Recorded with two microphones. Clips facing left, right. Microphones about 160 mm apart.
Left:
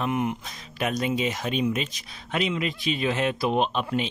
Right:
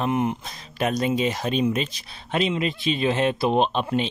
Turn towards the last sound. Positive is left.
turn(degrees=-30)  # may be behind; listen again after turning